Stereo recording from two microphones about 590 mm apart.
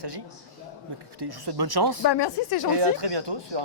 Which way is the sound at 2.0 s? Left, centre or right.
Left.